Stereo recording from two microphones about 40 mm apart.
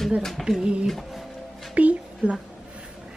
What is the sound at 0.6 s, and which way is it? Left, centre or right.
A woman's voice, right.